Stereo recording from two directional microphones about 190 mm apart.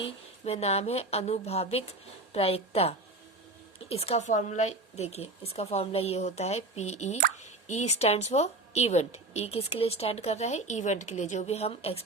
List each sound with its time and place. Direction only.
0.0 s speech: 30° left (ahead or behind)